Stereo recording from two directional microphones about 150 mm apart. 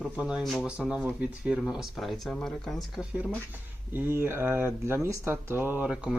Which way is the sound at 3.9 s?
15° right (ahead or behind).